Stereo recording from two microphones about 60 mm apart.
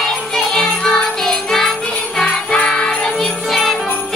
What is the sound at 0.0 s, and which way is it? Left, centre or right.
Music, centre.